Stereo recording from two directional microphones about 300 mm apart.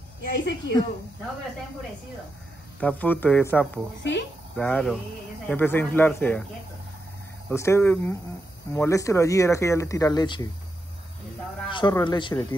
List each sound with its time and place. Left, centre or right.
0.2 s a woman's voice: left
2.8 s speech: centre
4.0 s a woman's voice: left
4.6 s speech: centre
7.4 s speech: centre
11.7 s speech: centre